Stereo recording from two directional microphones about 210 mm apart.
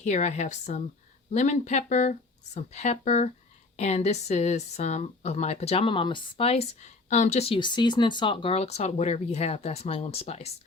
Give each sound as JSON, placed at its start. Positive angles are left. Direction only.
{"t": 0.0, "sound": "speech", "side_deg": 35}